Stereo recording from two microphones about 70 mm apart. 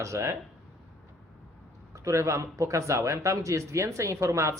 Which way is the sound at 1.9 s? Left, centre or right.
Right.